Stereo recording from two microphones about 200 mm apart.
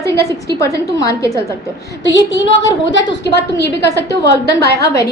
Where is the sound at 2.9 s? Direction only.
65° left (ahead or behind).